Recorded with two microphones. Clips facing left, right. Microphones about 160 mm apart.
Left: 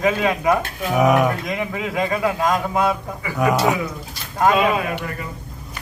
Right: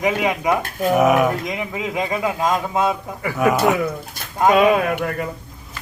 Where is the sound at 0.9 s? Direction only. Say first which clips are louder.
Even; centre (ahead or behind).